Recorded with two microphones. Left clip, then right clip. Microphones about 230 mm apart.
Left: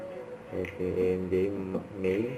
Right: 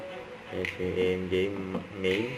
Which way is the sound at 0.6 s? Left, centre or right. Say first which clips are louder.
Right 1 dB; right.